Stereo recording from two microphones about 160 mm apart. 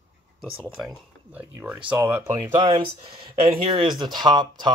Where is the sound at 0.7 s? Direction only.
5° right (ahead or behind).